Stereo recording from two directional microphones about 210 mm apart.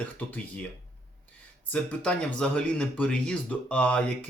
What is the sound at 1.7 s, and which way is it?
Speech, 5° left (ahead or behind).